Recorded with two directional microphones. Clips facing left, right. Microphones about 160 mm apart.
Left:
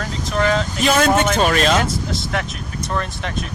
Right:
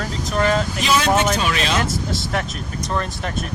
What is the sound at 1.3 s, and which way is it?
Speech, 45° left (ahead or behind).